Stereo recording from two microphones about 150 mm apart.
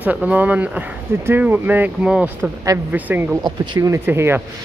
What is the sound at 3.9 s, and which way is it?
Speech, 15° right (ahead or behind).